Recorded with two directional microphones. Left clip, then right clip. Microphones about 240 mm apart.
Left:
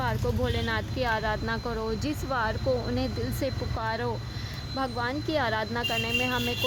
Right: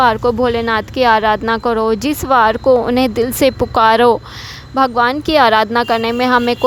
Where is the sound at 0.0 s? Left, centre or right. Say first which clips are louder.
Right 18 dB; right.